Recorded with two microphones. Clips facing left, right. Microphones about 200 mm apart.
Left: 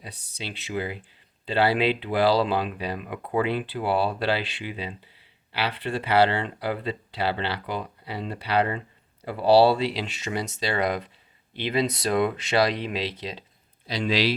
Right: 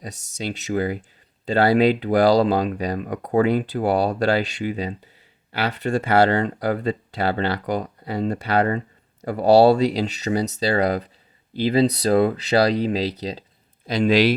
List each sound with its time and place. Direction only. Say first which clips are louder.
0.0 s speech: right 8 dB; 45° right (ahead or behind)
13.8 s speech: right 7 dB; 50° right (ahead or behind)